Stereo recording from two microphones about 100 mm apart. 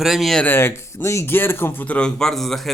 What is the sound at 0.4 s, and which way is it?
Speech, 20° left (ahead or behind).